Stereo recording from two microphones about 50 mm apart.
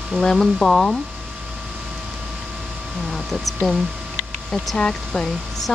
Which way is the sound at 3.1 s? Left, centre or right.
Centre.